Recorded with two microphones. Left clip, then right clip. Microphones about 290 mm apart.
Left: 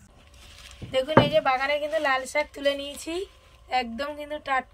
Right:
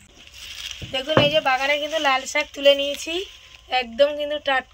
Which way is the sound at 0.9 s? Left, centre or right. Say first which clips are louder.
Right 2 dB; centre.